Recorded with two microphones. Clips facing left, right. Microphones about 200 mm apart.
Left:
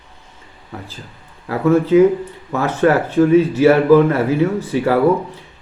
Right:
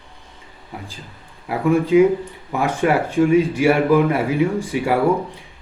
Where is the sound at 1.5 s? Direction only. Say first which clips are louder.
Left 3 dB; 15° right (ahead or behind).